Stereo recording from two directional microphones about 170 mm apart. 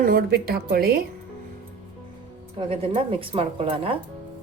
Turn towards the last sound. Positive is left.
turn(degrees=-35)  # may be behind; listen again after turning